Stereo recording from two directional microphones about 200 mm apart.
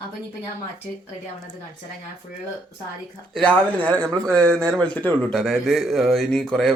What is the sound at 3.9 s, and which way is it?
Speech, 20° right (ahead or behind).